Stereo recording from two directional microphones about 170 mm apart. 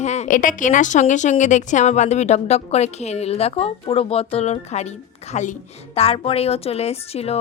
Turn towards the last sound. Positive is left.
turn(degrees=35)  # may be behind; listen again after turning